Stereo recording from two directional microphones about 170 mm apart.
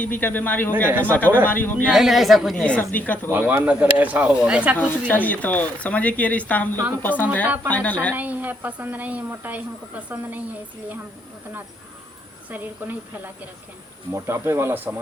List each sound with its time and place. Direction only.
0.0 s speech: 10° left (ahead or behind)
1.9 s a woman's voice: centre (ahead or behind)
3.2 s speech: 10° right (ahead or behind)
4.8 s speech: 10° left (ahead or behind)
7.4 s speech: 10° right (ahead or behind)
7.7 s speech: 10° left (ahead or behind)
8.1 s speech: 10° right (ahead or behind)
12.5 s speech: 10° right (ahead or behind)